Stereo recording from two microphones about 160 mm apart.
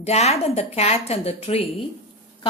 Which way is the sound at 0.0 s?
40° left (ahead or behind).